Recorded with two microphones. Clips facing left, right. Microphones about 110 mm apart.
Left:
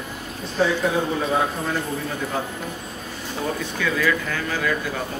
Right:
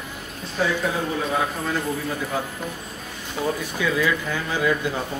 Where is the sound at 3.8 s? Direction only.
15° right (ahead or behind).